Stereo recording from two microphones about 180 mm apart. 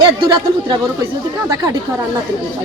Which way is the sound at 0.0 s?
25° right (ahead or behind).